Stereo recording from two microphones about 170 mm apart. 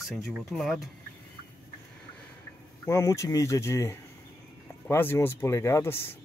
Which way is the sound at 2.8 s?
15° left (ahead or behind).